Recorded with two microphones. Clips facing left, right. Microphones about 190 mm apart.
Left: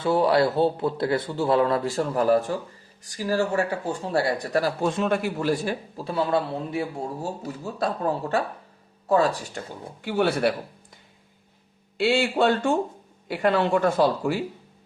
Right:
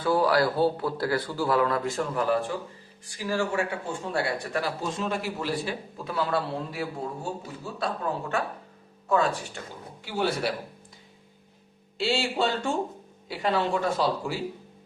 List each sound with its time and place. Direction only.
0.0 s speech: 25° left (ahead or behind)
4.8 s speech: 60° left (ahead or behind)
6.0 s speech: 30° left (ahead or behind)
7.2 s speech: 40° left (ahead or behind)
10.0 s speech: 60° left (ahead or behind)
11.9 s speech: 55° left (ahead or behind)